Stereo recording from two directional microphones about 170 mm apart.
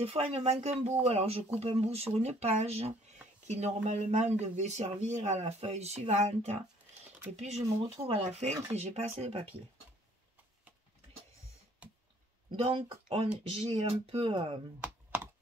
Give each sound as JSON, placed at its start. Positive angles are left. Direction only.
{"t": 0.0, "sound": "speech", "side_deg": -35}
{"t": 12.4, "sound": "speech", "side_deg": -30}